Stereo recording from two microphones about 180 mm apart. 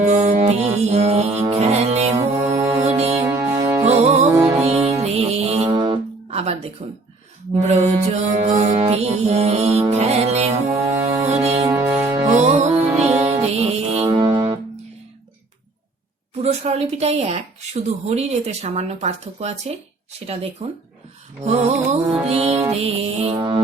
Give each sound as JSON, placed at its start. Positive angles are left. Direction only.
{"t": 0.1, "sound": "music", "side_deg": -40}
{"t": 2.5, "sound": "music", "side_deg": -15}
{"t": 2.8, "sound": "music", "side_deg": -35}
{"t": 3.2, "sound": "music", "side_deg": -15}
{"t": 3.8, "sound": "music", "side_deg": -35}
{"t": 8.4, "sound": "speech", "side_deg": -40}
{"t": 10.7, "sound": "music", "side_deg": -15}
{"t": 11.3, "sound": "music", "side_deg": -35}
{"t": 11.7, "sound": "music", "side_deg": -15}
{"t": 12.3, "sound": "music", "side_deg": -40}
{"t": 13.1, "sound": "music", "side_deg": -10}
{"t": 13.3, "sound": "music", "side_deg": -35}
{"t": 16.4, "sound": "speech", "side_deg": -35}